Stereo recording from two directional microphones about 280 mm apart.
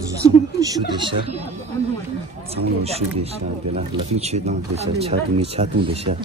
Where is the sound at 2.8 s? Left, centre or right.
Right.